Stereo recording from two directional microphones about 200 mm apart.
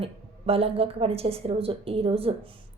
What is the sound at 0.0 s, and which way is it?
Speech, 30° right (ahead or behind).